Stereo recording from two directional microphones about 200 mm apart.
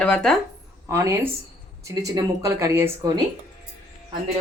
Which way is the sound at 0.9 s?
15° right (ahead or behind).